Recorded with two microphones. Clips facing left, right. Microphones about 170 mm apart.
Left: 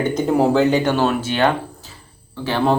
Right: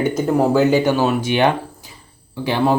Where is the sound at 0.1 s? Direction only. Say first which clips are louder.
Left 2 dB; 5° right (ahead or behind).